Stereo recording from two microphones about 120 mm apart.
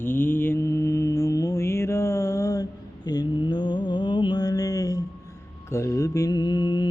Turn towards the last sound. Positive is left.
turn(degrees=40)  # may be behind; listen again after turning